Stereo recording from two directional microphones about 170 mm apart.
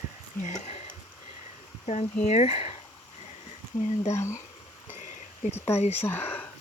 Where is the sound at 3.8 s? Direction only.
40° left (ahead or behind).